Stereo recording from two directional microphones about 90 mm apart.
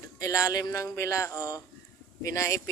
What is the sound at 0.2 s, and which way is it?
A man's voice, 35° left (ahead or behind).